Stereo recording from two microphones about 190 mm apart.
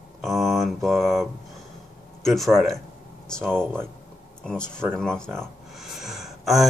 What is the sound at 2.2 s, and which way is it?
Speech, centre (ahead or behind).